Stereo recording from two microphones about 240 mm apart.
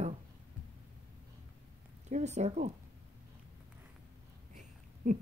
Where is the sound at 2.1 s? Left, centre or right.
Right.